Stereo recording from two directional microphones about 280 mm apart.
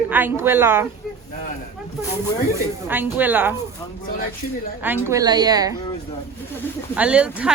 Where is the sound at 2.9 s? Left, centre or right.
Centre.